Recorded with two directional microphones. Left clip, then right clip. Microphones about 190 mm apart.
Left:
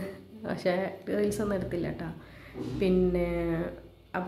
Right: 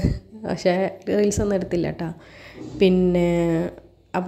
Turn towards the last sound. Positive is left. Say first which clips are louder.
# right 8 dB
turn(degrees=-40)  # may be behind; listen again after turning